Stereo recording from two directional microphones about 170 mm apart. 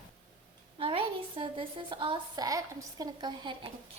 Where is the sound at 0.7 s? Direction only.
30° right (ahead or behind).